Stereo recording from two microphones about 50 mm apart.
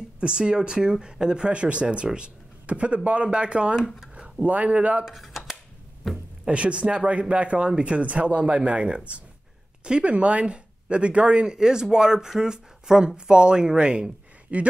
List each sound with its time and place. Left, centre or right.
0.2 s speech: centre
5.0 s a sound: centre
6.0 s speech: centre
6.4 s speech: right